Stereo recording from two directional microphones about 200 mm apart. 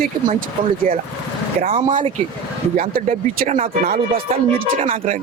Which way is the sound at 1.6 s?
45° right (ahead or behind).